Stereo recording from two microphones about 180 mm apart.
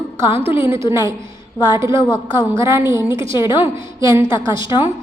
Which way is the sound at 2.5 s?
15° right (ahead or behind).